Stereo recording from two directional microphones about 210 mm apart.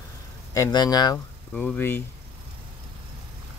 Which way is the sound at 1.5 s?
10° left (ahead or behind).